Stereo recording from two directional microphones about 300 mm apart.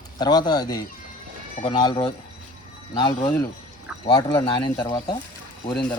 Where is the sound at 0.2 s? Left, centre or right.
Centre.